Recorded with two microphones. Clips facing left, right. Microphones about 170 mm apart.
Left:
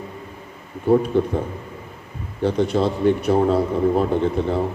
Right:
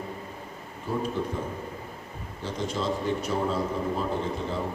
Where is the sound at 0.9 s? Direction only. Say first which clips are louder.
Left 14 dB; 60° left (ahead or behind).